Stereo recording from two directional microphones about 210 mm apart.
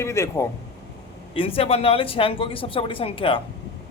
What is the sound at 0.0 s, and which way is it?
Speech, 15° left (ahead or behind).